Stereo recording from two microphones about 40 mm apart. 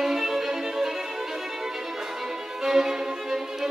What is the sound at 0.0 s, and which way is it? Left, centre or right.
Violin, centre.